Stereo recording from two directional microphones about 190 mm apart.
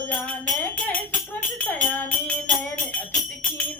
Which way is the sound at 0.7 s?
10° left (ahead or behind).